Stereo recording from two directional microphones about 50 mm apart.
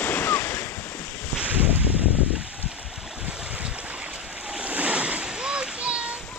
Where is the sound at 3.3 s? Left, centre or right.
Right.